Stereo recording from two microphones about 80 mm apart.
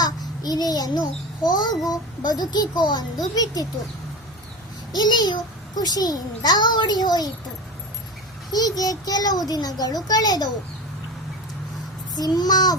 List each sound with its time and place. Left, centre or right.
0.0 s babbling: left
1.5 s a child's voice: left
4.9 s a child's voice: left
8.5 s a child's voice: left
12.1 s a child's voice: left